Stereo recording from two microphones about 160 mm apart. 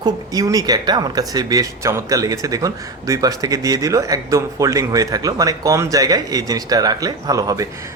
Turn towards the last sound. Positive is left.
turn(degrees=-20)  # may be behind; listen again after turning